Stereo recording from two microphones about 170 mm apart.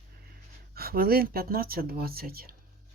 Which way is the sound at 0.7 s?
60° right (ahead or behind).